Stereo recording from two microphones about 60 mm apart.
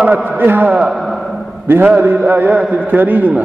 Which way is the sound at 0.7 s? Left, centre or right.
Centre.